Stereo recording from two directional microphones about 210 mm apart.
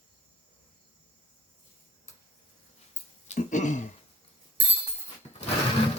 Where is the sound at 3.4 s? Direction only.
35° left (ahead or behind).